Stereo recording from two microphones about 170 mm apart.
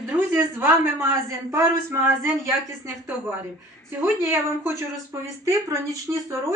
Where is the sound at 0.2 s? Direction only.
15° right (ahead or behind).